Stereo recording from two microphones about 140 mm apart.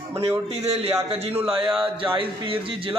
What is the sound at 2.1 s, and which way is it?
Speech, 40° right (ahead or behind).